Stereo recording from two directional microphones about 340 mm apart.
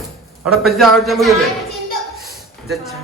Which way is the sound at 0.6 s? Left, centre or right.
Centre.